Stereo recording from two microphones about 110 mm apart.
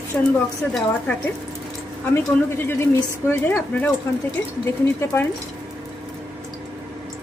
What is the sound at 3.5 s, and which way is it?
Speech, 10° left (ahead or behind).